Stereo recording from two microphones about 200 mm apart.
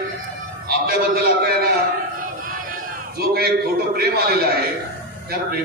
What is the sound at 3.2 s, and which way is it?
A man's voice, 50° right (ahead or behind).